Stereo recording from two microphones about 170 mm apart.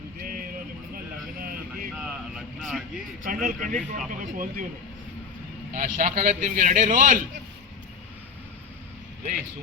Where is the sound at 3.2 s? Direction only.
50° right (ahead or behind).